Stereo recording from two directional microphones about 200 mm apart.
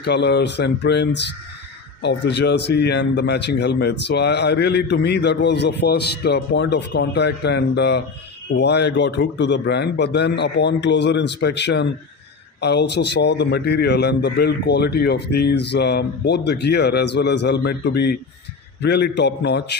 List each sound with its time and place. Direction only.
0.0 s a man's voice: 55° left (ahead or behind)